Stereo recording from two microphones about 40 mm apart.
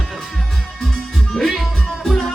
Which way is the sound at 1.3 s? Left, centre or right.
Centre.